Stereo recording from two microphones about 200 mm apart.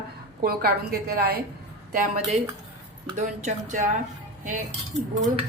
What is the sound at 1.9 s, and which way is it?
Speech, 40° right (ahead or behind).